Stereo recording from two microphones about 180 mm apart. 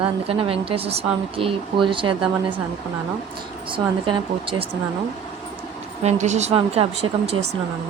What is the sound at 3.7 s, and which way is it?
Speech, 25° right (ahead or behind).